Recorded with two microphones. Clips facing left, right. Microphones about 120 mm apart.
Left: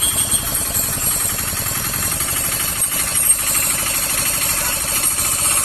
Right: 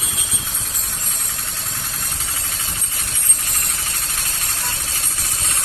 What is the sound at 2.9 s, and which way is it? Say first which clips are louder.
Engine: left 5 dB; 70° left (ahead or behind).